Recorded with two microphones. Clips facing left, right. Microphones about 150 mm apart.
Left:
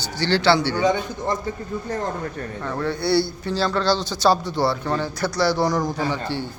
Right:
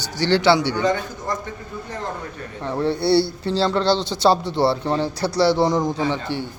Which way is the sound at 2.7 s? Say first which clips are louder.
Right 4 dB; 25° right (ahead or behind).